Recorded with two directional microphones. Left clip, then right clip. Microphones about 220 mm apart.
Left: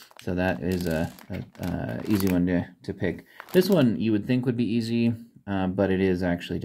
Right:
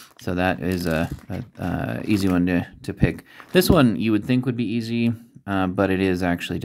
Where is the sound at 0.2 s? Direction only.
25° right (ahead or behind).